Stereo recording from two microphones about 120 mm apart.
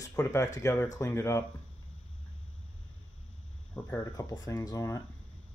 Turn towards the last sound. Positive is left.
turn(degrees=25)  # may be behind; listen again after turning